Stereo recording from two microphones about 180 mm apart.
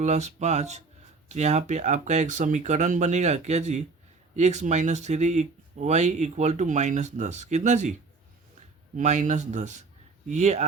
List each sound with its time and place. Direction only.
0.0 s speech: 40° right (ahead or behind)
9.0 s speech: 40° right (ahead or behind)